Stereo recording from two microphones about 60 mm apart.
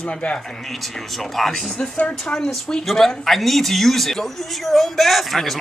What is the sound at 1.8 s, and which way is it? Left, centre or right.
Speech, left.